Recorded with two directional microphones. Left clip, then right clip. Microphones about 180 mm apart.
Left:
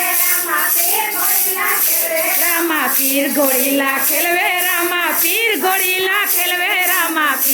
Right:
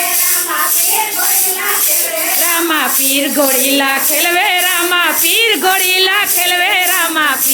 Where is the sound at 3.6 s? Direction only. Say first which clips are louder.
Right 4 dB; 15° right (ahead or behind).